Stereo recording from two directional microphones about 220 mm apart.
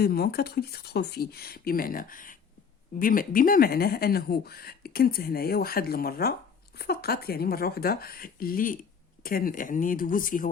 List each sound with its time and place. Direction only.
0.0 s speech: 45° left (ahead or behind)